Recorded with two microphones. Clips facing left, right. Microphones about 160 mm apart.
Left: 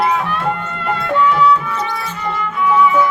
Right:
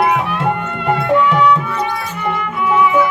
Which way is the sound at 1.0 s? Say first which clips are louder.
Right 1 dB; 15° right (ahead or behind).